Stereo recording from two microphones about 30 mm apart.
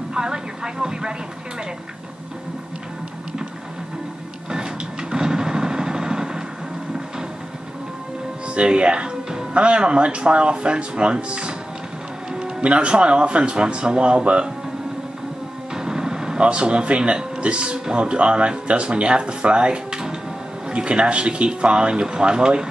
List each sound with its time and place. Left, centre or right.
0.1 s speech: right
4.5 s a sound: right
8.5 s speech: right
12.6 s speech: right
15.7 s a sound: right
16.3 s speech: right